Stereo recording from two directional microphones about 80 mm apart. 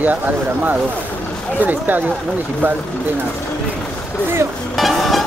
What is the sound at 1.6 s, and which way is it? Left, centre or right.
Speech, right.